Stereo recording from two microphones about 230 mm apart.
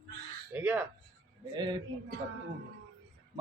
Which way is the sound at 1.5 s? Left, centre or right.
Centre.